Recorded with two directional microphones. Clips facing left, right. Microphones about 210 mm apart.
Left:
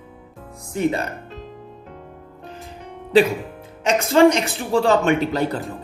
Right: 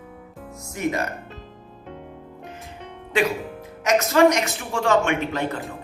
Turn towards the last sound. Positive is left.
turn(degrees=35)  # may be behind; listen again after turning